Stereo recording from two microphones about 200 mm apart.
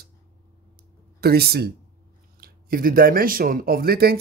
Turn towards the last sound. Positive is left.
turn(degrees=-50)  # may be behind; listen again after turning